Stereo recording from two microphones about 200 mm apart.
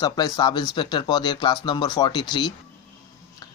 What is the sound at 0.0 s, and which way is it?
Speech, 20° left (ahead or behind).